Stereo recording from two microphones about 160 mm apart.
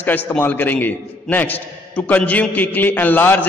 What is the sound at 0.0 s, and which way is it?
A man's voice, 10° left (ahead or behind).